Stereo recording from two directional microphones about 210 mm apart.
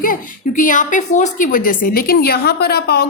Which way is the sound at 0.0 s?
40° left (ahead or behind).